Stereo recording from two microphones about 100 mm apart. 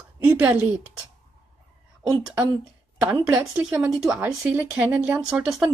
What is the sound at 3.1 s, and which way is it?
A woman's voice, 20° right (ahead or behind).